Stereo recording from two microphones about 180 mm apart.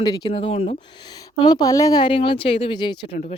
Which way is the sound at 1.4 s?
20° left (ahead or behind).